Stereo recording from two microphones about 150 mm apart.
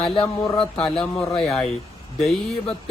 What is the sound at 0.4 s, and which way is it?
Speech, 35° left (ahead or behind).